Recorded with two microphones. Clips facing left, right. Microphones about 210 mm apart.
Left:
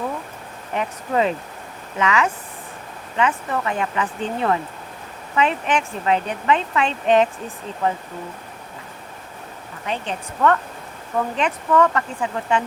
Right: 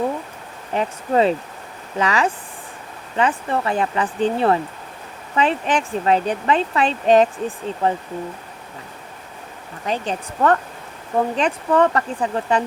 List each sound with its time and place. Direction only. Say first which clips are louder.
0.7 s speech: right 3 dB; 30° right (ahead or behind)
9.8 s speech: right 3 dB; 35° right (ahead or behind)